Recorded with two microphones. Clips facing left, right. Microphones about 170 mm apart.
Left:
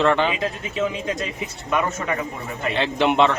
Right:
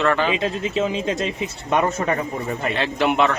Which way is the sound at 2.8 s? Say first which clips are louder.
Left 1 dB; 25° left (ahead or behind).